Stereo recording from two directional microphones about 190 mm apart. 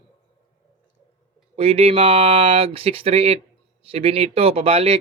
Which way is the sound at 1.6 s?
30° right (ahead or behind).